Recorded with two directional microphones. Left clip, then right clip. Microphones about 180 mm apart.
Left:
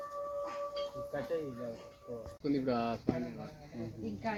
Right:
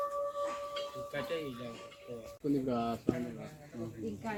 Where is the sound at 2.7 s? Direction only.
25° right (ahead or behind).